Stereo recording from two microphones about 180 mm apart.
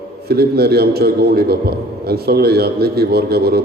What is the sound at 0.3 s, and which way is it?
A man's voice, 60° right (ahead or behind).